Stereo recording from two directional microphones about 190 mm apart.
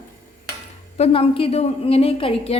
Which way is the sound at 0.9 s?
30° left (ahead or behind).